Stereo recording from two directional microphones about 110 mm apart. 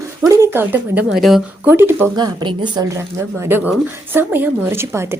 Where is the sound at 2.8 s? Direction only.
25° right (ahead or behind).